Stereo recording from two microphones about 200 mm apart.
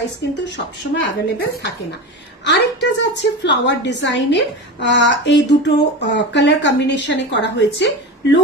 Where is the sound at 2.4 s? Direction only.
60° left (ahead or behind).